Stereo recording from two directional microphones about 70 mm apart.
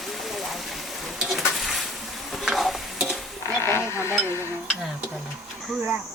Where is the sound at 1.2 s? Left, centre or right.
Centre.